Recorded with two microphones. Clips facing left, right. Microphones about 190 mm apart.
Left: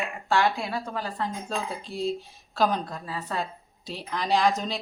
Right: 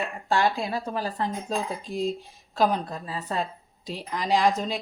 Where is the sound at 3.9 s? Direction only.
10° right (ahead or behind).